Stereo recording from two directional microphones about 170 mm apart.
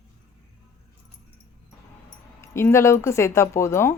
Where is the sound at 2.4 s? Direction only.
15° left (ahead or behind).